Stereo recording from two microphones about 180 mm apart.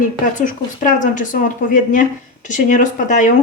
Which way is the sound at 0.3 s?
45° left (ahead or behind).